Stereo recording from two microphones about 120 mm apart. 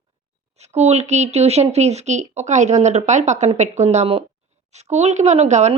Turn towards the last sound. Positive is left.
turn(degrees=-70)  # may be behind; listen again after turning